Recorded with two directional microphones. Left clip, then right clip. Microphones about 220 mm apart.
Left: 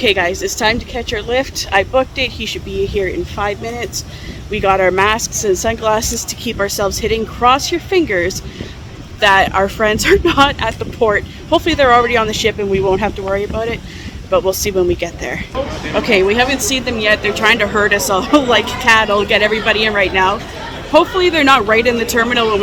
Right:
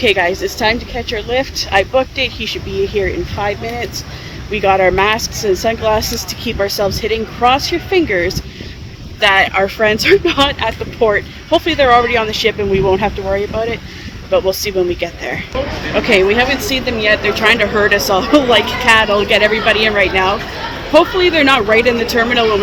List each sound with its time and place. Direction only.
0.0 s speech: 10° left (ahead or behind)
5.2 s speech: 35° left (ahead or behind)
5.6 s speech: 15° left (ahead or behind)